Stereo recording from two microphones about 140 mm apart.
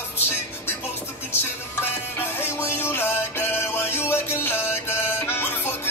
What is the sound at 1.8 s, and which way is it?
Music, 15° left (ahead or behind).